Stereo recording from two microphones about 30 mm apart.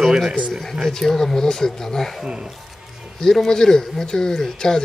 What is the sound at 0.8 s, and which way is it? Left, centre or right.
Speech, centre.